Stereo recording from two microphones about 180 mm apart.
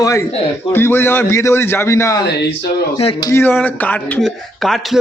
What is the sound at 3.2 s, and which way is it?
Speech, 15° left (ahead or behind).